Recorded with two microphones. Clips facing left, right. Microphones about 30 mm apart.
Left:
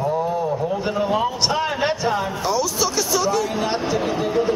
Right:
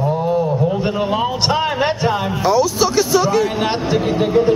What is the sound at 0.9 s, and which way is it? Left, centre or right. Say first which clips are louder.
A man's voice: right 2 dB; right.